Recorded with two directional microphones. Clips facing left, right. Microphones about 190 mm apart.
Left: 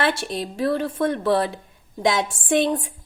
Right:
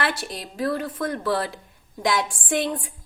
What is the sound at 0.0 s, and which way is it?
A woman's voice, 25° left (ahead or behind).